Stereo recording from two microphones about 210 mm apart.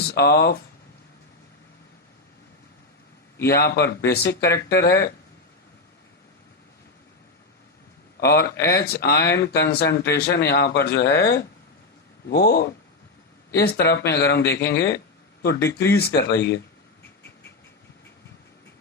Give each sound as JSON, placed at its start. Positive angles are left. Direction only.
{"t": 0.1, "sound": "speech", "side_deg": 50}
{"t": 3.5, "sound": "speech", "side_deg": 50}
{"t": 8.3, "sound": "speech", "side_deg": 50}